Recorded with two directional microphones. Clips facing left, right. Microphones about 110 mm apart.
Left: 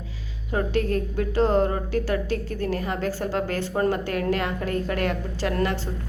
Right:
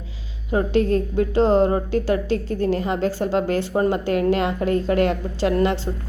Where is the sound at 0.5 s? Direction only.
25° right (ahead or behind).